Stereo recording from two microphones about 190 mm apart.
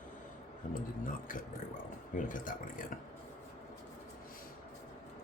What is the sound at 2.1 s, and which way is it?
Speech, 45° left (ahead or behind).